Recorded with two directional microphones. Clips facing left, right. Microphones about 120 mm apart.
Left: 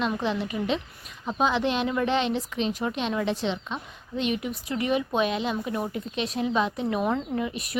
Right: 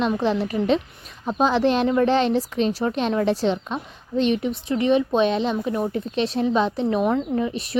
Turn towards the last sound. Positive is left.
turn(degrees=-30)  # may be behind; listen again after turning